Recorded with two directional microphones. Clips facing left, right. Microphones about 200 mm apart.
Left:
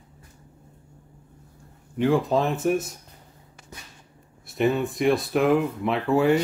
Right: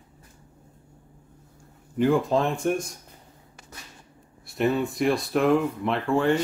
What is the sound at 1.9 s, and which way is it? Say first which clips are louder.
Speech: even; centre (ahead or behind).